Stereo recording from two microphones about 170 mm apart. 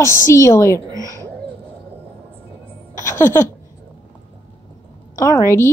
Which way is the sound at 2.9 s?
15° left (ahead or behind).